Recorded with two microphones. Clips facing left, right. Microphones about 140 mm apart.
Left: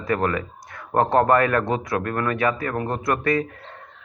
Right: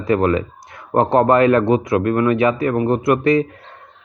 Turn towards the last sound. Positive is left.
turn(degrees=-20)  # may be behind; listen again after turning